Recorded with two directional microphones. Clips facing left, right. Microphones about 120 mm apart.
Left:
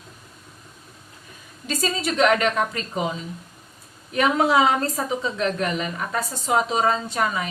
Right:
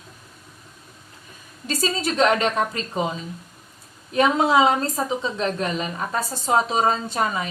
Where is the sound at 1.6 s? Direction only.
35° right (ahead or behind).